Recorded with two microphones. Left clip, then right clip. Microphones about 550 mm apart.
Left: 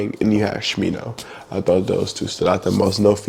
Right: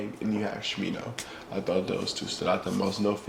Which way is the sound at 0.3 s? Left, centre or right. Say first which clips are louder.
Left 11 dB; left.